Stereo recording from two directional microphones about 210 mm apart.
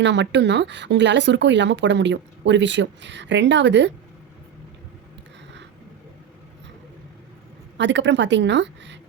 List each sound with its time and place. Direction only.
0.0 s speech: 60° right (ahead or behind)
7.8 s speech: 60° right (ahead or behind)